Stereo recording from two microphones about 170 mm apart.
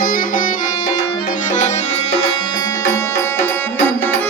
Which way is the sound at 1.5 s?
45° left (ahead or behind).